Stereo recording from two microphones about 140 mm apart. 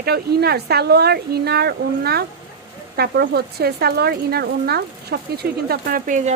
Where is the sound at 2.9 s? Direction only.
90° right; by 6.3 s 60° right (ahead or behind).